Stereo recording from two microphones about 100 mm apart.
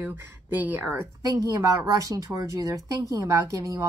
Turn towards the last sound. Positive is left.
turn(degrees=-35)  # may be behind; listen again after turning